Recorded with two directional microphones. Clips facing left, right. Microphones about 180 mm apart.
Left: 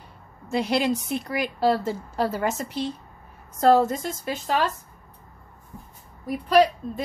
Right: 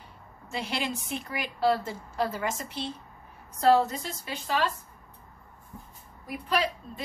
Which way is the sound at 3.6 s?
45° left (ahead or behind).